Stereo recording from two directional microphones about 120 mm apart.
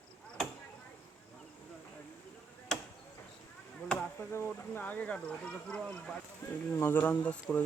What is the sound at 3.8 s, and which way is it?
Speech, 10° left (ahead or behind).